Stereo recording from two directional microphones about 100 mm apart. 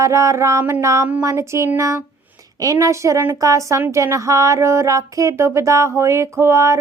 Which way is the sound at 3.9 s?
30° right (ahead or behind).